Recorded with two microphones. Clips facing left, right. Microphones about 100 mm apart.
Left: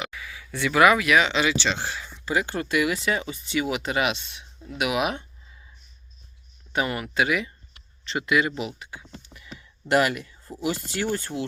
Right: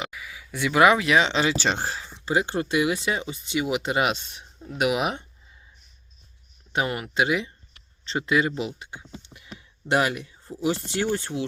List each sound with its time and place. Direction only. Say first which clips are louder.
0.1 s speech: left 1 dB; 15° right (ahead or behind); by 2.0 s 35° right (ahead or behind)
2.0 s speech: right 1 dB; 25° right (ahead or behind)
6.7 s speech: even; 20° right (ahead or behind)
9.1 s a sound: right 2 dB; 15° right (ahead or behind)
9.6 s speech: left 2 dB; 20° right (ahead or behind)